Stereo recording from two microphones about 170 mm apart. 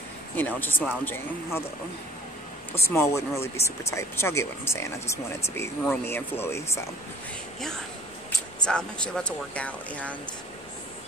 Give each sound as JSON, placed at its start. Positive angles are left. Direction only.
{"t": 0.4, "sound": "speech", "side_deg": 10}
{"t": 2.9, "sound": "speech", "side_deg": 15}
{"t": 8.6, "sound": "speech", "side_deg": 5}